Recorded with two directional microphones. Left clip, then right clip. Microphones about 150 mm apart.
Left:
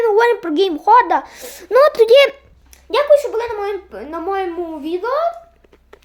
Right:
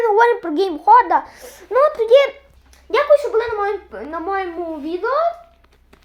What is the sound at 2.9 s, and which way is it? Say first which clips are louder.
A child's voice: left 1 dB; 15° left (ahead or behind).